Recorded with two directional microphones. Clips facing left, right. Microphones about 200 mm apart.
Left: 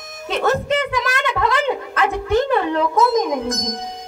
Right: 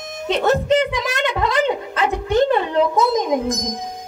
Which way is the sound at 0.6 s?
20° right (ahead or behind).